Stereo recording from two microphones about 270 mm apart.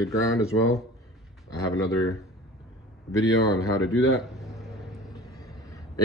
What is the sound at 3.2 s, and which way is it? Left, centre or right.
Speech, centre.